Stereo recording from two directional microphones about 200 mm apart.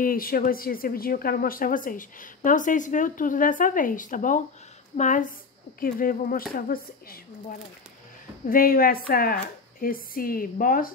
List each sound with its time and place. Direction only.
0.0 s speech: 45° left (ahead or behind)